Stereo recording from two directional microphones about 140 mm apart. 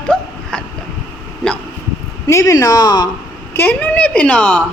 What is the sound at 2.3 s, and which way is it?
Speech, 20° left (ahead or behind).